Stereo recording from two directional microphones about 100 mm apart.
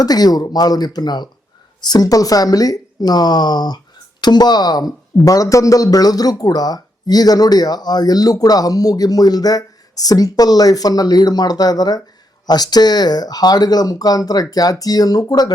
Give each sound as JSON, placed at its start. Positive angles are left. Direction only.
{"t": 0.0, "sound": "speech", "side_deg": 40}